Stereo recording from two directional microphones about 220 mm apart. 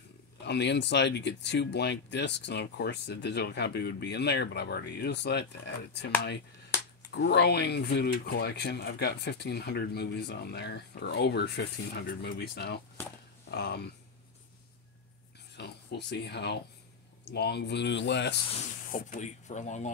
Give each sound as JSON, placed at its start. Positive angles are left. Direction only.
{"t": 0.5, "sound": "speech", "side_deg": 50}
{"t": 15.5, "sound": "speech", "side_deg": 50}
{"t": 18.9, "sound": "speech", "side_deg": 35}